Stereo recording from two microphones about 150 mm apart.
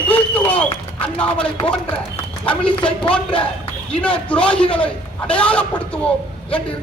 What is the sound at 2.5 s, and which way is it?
Speech, 10° left (ahead or behind).